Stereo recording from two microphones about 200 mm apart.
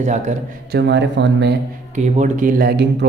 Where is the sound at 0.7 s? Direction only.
60° right (ahead or behind).